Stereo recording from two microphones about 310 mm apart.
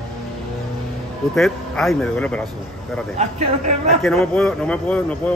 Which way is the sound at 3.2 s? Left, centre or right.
Right.